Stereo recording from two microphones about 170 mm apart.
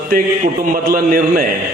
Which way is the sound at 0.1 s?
55° right (ahead or behind).